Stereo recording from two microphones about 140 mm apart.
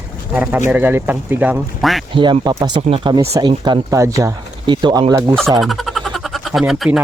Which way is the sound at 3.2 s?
25° right (ahead or behind).